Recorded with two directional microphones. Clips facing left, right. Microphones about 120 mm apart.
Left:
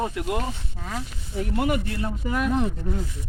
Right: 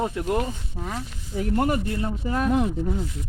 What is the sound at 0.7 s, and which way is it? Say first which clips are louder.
Speech: right 2 dB; 15° right (ahead or behind).